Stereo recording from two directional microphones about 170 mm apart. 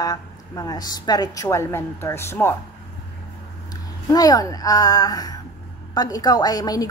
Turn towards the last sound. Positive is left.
turn(degrees=20)  # may be behind; listen again after turning